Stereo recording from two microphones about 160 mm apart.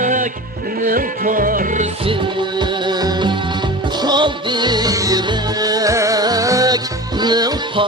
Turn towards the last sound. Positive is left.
turn(degrees=-25)  # may be behind; listen again after turning